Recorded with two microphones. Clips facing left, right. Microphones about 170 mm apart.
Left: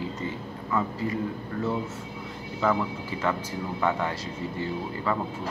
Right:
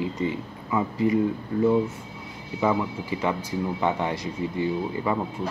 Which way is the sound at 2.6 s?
15° right (ahead or behind).